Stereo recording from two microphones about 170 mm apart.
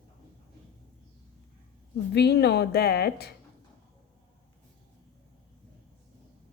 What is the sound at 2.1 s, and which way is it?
A woman's voice, 75° left (ahead or behind).